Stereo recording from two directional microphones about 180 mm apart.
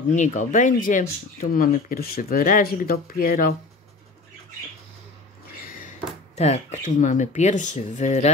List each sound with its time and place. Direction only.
0.1 s speech: 40° left (ahead or behind)
5.7 s speech: 45° left (ahead or behind)